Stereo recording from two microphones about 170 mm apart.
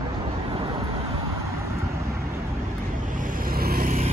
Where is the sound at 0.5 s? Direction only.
30° right (ahead or behind).